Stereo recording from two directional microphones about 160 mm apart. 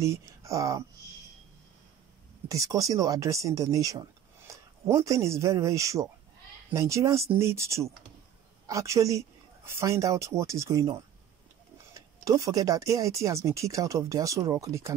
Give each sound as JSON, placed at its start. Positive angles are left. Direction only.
{"t": 0.0, "sound": "speech", "side_deg": -20}
{"t": 2.4, "sound": "speech", "side_deg": -20}